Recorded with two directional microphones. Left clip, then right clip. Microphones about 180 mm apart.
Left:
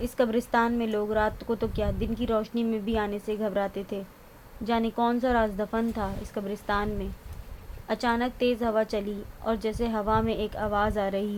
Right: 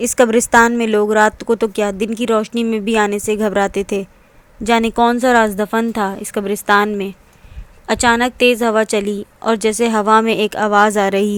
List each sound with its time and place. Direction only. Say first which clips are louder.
0.0 s a woman's voice: right 13 dB; 50° right (ahead or behind)